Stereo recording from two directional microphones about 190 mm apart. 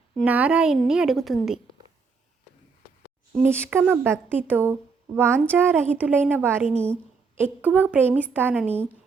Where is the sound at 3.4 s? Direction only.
10° right (ahead or behind).